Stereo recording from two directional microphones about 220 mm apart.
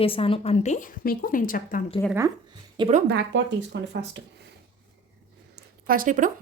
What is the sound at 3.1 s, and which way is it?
Speech, 55° right (ahead or behind).